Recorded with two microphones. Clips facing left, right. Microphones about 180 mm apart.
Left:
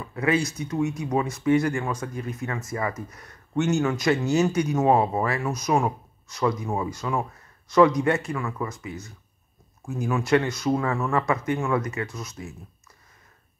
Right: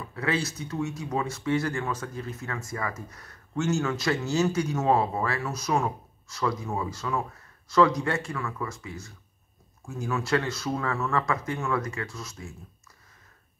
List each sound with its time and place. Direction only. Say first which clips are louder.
0.1 s speech: left 5 dB; 15° left (ahead or behind)